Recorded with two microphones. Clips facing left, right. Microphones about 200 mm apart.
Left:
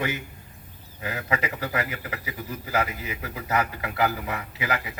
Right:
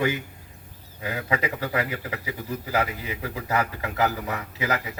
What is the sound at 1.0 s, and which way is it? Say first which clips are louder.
A man's voice: right 2 dB; 30° right (ahead or behind).